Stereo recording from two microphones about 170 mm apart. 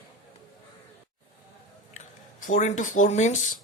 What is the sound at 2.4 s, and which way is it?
Speech, 50° left (ahead or behind).